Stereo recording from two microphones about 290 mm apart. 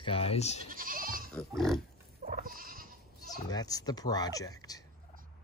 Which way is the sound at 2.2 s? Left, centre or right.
Right.